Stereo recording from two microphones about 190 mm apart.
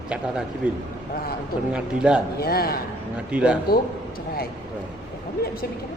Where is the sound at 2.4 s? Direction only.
55° left (ahead or behind).